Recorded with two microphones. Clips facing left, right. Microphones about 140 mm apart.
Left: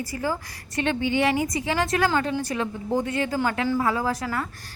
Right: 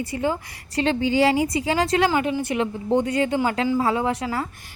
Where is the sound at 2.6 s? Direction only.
25° right (ahead or behind).